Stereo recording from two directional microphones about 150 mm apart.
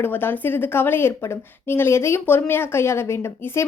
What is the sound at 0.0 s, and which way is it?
A woman's voice, 15° left (ahead or behind).